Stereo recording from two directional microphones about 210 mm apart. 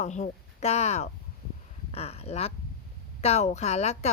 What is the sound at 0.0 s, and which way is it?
Speech, 35° left (ahead or behind).